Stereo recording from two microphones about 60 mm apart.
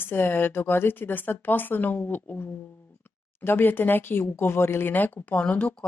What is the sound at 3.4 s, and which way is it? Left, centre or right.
Speech, left.